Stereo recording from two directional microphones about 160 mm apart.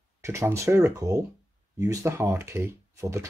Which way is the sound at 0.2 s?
15° right (ahead or behind).